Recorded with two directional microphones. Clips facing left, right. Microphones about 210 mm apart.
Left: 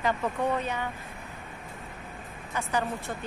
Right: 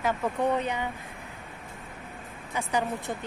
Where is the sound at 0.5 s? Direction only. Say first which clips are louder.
Right 2 dB; 15° right (ahead or behind).